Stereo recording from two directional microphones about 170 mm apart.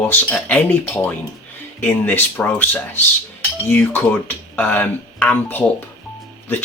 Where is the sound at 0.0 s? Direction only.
10° left (ahead or behind).